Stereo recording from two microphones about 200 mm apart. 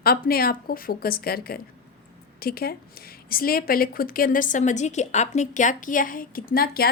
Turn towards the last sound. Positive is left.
turn(degrees=50)  # may be behind; listen again after turning